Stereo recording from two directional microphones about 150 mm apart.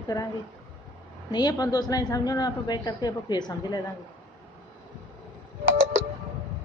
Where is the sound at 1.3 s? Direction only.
25° left (ahead or behind).